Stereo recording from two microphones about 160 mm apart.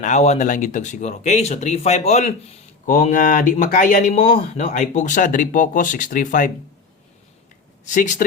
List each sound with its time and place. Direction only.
0.0 s speech: 45° left (ahead or behind)
7.9 s speech: 50° left (ahead or behind)